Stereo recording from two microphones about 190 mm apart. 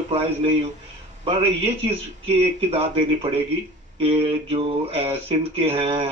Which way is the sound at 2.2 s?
30° right (ahead or behind).